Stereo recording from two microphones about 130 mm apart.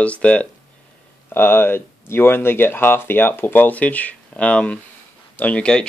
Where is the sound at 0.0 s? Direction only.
10° left (ahead or behind).